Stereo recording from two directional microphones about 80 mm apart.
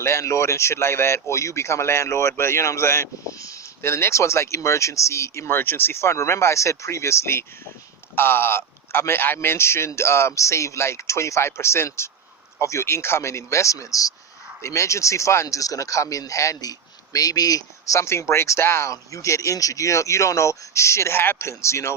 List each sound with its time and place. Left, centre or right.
0.0 s speech: left
3.8 s speech: left